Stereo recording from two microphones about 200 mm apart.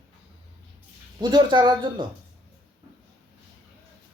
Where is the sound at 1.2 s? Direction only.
20° right (ahead or behind).